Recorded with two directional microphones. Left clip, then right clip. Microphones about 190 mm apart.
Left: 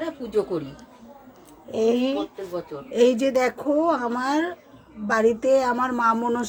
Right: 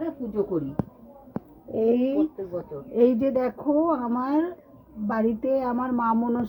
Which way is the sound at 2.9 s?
5° left (ahead or behind).